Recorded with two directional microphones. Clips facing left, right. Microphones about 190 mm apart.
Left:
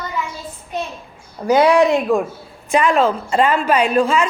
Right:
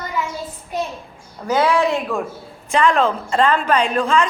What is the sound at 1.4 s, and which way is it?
A woman's voice, 15° left (ahead or behind).